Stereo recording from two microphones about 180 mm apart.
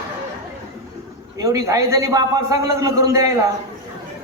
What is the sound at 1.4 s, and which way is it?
A man's voice, 20° right (ahead or behind).